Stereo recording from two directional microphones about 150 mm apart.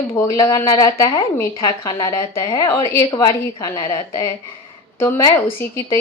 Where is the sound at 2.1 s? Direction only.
25° left (ahead or behind).